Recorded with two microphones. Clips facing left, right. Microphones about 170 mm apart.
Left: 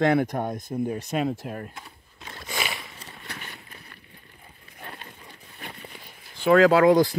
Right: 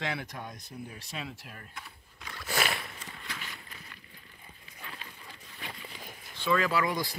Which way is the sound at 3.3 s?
60° left (ahead or behind).